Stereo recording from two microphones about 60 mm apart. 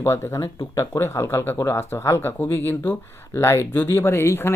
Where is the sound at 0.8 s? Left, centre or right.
Left.